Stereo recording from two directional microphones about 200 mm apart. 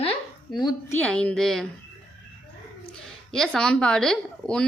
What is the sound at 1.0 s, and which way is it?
Speech, 5° left (ahead or behind).